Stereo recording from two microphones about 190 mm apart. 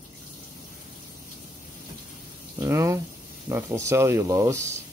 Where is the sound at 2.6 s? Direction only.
15° right (ahead or behind).